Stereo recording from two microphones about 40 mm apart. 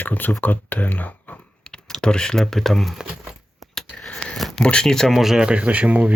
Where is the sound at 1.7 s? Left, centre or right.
Centre.